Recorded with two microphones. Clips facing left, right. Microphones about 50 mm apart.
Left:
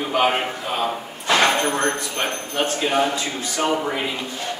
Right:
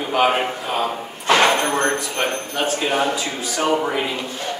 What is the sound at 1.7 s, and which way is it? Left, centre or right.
Speech, right.